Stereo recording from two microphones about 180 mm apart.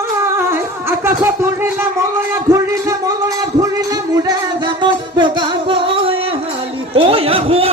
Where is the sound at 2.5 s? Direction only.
20° right (ahead or behind).